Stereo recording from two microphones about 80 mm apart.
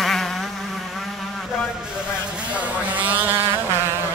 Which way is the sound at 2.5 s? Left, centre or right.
Right.